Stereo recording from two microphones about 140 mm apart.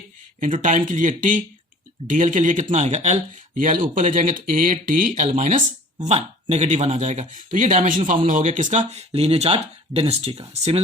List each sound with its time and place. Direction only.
0.3 s speech: 70° right (ahead or behind)
5.3 s speech: 60° right (ahead or behind)
8.9 s speech: 50° right (ahead or behind)